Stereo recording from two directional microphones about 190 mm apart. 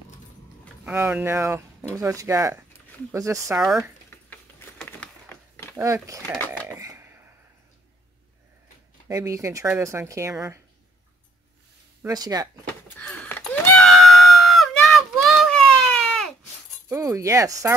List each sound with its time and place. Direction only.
0.8 s speech: 10° right (ahead or behind)
3.5 s speech: centre (ahead or behind)
4.3 s a sound: 10° left (ahead or behind)
5.8 s speech: 15° right (ahead or behind)
6.8 s a sound: 15° right (ahead or behind)
9.1 s speech: 15° right (ahead or behind)
12.1 s speech: 20° right (ahead or behind)
12.8 s a sound: 10° left (ahead or behind)
16.9 s speech: 15° right (ahead or behind)